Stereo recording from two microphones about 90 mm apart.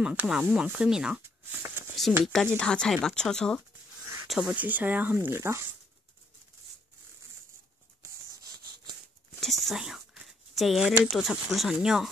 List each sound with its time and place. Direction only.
0.0 s speech: 15° right (ahead or behind)
2.2 s speech: centre (ahead or behind)
4.3 s speech: 5° right (ahead or behind)
4.6 s speech: 20° right (ahead or behind)
9.4 s a sound: centre (ahead or behind)
11.1 s speech: centre (ahead or behind)